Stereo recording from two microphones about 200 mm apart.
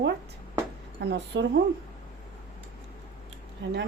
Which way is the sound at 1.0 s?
60° right (ahead or behind).